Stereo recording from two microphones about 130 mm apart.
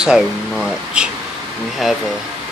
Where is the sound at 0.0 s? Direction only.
5° right (ahead or behind).